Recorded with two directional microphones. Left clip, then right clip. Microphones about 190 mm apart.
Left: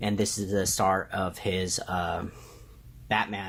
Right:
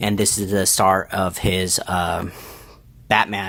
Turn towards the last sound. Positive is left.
turn(degrees=-35)  # may be behind; listen again after turning